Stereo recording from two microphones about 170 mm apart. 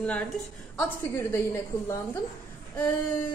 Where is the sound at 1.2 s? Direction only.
15° left (ahead or behind).